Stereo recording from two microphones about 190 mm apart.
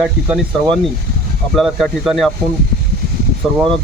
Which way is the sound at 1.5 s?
Centre (ahead or behind).